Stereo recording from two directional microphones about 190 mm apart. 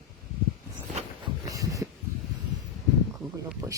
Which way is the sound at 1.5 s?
20° right (ahead or behind).